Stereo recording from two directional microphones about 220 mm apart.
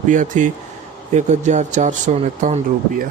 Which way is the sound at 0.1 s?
35° right (ahead or behind).